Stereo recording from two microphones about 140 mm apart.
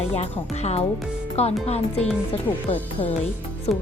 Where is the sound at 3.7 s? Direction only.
50° left (ahead or behind).